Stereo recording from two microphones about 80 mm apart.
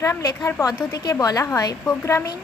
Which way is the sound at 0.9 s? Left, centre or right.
Left.